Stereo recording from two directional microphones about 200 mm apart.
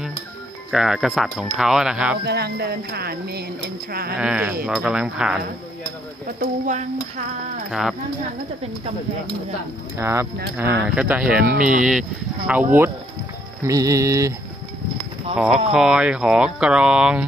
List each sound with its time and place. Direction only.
0.7 s speech: centre (ahead or behind)
2.2 s speech: 55° right (ahead or behind)
4.2 s speech: 5° right (ahead or behind)
6.4 s speech: 35° right (ahead or behind)
9.9 s speech: 15° right (ahead or behind)
11.5 s speech: 40° right (ahead or behind)
11.8 s speech: 5° right (ahead or behind)
13.7 s speech: 15° right (ahead or behind)
15.3 s speech: 5° right (ahead or behind)